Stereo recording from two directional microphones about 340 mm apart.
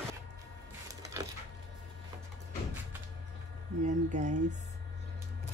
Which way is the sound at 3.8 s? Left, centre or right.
Right.